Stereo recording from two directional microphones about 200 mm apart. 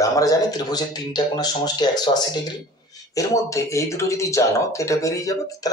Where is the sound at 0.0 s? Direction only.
15° left (ahead or behind).